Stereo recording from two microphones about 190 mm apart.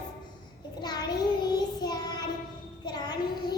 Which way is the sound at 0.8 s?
20° left (ahead or behind).